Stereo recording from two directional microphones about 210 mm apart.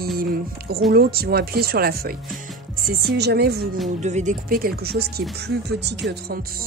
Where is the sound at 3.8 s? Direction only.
35° right (ahead or behind); by 6.3 s 50° right (ahead or behind).